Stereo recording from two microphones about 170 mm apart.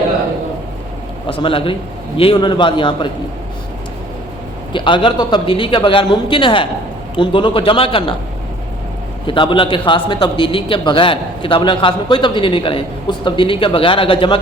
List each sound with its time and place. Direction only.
1.3 s a man's voice: 30° left (ahead or behind)
4.7 s a man's voice: 30° left (ahead or behind)
9.2 s a man's voice: 30° left (ahead or behind)